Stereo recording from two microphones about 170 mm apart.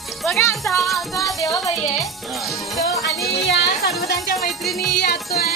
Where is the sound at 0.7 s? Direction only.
Centre (ahead or behind).